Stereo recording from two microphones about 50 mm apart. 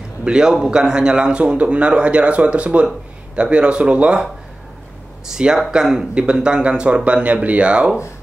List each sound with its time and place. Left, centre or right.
0.2 s a man's voice: centre
5.3 s a man's voice: centre